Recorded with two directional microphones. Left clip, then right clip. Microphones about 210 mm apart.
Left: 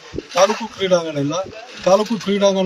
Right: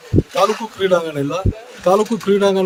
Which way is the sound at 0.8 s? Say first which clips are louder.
Right 1 dB; 20° right (ahead or behind).